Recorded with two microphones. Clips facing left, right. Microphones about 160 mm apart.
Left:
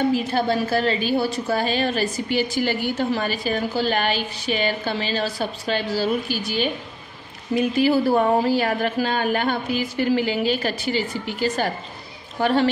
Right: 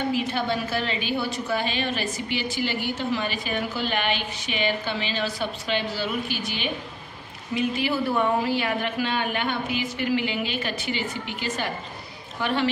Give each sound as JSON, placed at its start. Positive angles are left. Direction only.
{"t": 0.1, "sound": "a woman's voice", "side_deg": 40}